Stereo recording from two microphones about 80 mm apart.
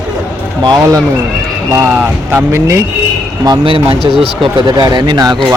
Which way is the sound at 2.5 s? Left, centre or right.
Right.